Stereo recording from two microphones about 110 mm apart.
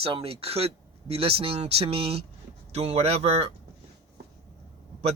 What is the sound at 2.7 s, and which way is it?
Speech, 75° right (ahead or behind).